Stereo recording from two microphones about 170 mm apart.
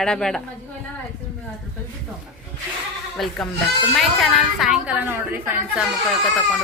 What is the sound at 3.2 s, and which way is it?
Speech, centre (ahead or behind).